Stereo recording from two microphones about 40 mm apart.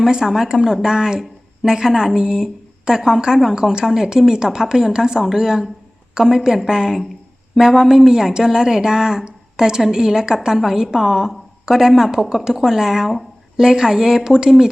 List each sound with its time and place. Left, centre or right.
0.0 s a woman's voice: centre